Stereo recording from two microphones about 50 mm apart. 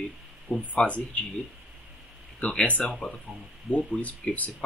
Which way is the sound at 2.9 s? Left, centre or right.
Centre.